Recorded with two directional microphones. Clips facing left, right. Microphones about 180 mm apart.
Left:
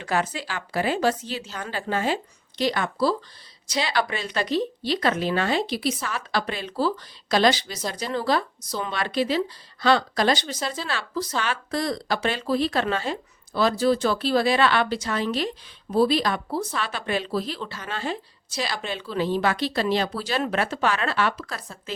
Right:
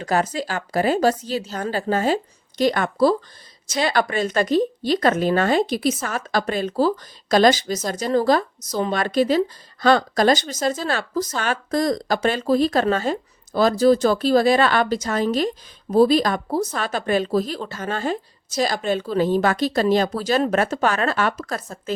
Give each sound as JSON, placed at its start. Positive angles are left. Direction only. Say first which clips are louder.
{"t": 0.0, "sound": "a woman's voice", "louder": "right 4 dB", "side_deg": -40}